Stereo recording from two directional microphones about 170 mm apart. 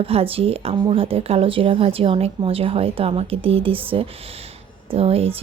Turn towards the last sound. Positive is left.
turn(degrees=-35)  # may be behind; listen again after turning